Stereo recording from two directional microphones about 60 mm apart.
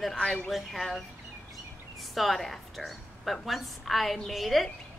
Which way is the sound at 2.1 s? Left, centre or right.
Centre.